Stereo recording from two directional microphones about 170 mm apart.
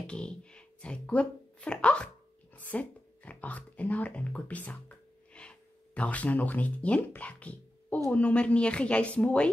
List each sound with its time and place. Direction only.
0.0 s speech: 5° left (ahead or behind)